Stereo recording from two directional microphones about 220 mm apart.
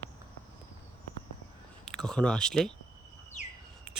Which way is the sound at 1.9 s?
5° left (ahead or behind).